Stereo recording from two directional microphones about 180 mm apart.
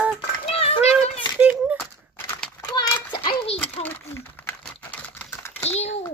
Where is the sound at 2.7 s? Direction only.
20° left (ahead or behind).